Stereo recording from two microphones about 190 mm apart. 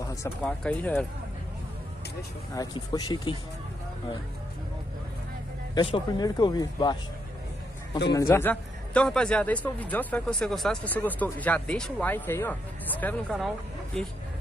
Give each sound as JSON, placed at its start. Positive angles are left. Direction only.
{"t": 0.4, "sound": "a man's voice", "side_deg": 5}
{"t": 2.5, "sound": "speech", "side_deg": 20}
{"t": 5.8, "sound": "speech", "side_deg": 25}
{"t": 8.1, "sound": "a man's voice", "side_deg": 15}